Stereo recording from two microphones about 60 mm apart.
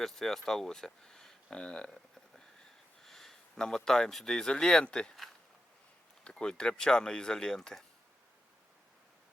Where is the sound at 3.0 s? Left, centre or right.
Centre.